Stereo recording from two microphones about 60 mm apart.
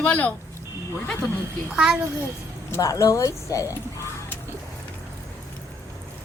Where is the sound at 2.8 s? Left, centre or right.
Left.